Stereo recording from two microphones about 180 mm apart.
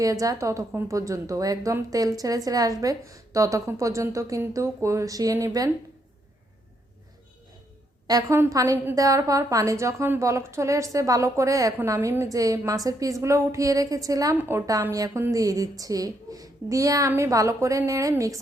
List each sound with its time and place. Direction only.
0.0 s a woman's voice: 20° right (ahead or behind)
8.0 s a woman's voice: 20° right (ahead or behind)